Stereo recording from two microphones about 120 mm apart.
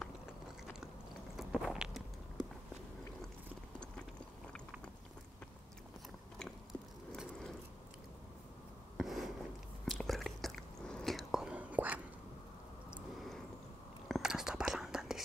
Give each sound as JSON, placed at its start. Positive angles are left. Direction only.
{"t": 1.3, "sound": "walk", "side_deg": -5}
{"t": 6.4, "sound": "biting", "side_deg": 0}
{"t": 8.9, "sound": "a sound", "side_deg": 0}
{"t": 9.8, "sound": "whispering", "side_deg": 0}
{"t": 14.0, "sound": "whispering", "side_deg": -5}